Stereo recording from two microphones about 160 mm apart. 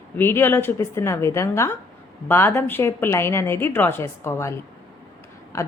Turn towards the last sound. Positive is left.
turn(degrees=20)  # may be behind; listen again after turning